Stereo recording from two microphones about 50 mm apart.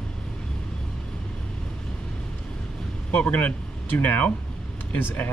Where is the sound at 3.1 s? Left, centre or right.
Left.